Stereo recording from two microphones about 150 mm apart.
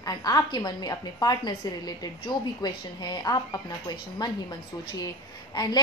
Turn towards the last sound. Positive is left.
turn(degrees=25)  # may be behind; listen again after turning